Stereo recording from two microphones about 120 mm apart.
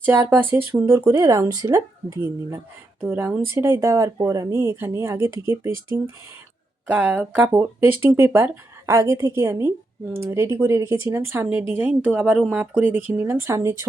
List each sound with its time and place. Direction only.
0.0 s speech: 15° right (ahead or behind)
6.8 s a woman's voice: 15° right (ahead or behind)